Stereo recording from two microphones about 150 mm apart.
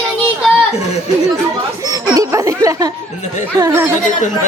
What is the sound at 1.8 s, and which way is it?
Speech, 25° right (ahead or behind).